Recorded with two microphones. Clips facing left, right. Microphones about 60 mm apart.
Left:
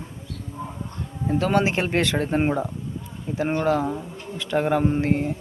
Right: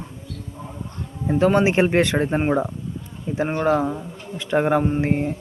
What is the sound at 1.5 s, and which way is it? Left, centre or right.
Speech, right.